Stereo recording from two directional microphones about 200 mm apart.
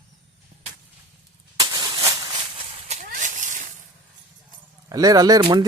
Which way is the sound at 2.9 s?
40° right (ahead or behind).